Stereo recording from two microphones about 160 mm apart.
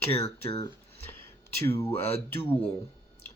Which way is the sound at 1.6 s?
15° left (ahead or behind).